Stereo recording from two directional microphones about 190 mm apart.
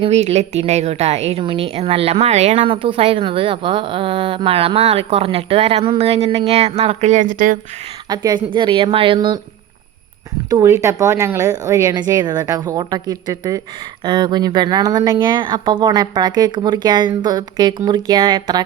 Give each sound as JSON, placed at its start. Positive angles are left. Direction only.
{"t": 0.0, "sound": "a woman's voice", "side_deg": -35}
{"t": 8.1, "sound": "speech", "side_deg": -20}
{"t": 10.5, "sound": "a woman's voice", "side_deg": -15}